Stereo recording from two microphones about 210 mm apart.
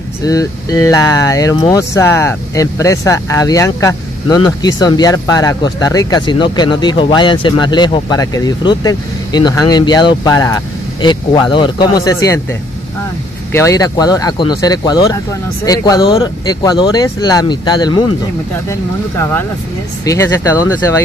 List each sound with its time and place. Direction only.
0.2 s speech: 15° left (ahead or behind)
13.5 s speech: 15° left (ahead or behind)